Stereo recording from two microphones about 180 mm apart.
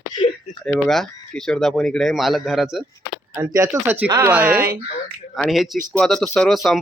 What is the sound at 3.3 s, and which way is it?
Speech, 15° right (ahead or behind).